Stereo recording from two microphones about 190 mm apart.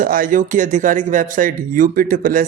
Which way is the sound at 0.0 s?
45° right (ahead or behind).